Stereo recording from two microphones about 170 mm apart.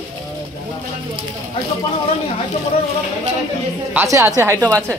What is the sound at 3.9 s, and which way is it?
Speech, 15° right (ahead or behind).